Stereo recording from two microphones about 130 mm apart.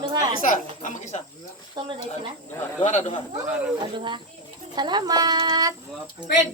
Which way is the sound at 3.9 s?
40° right (ahead or behind).